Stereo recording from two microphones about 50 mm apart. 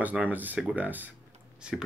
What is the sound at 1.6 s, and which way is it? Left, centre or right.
Speech, centre.